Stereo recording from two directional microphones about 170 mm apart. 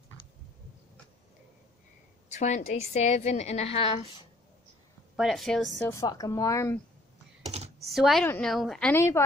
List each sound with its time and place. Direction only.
2.3 s a woman's voice: 45° left (ahead or behind)
5.1 s a woman's voice: centre (ahead or behind)
5.9 s speech: 20° left (ahead or behind)
7.8 s a woman's voice: centre (ahead or behind)